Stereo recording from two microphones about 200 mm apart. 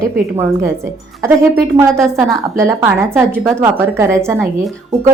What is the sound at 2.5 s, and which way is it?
A woman's voice, 10° right (ahead or behind).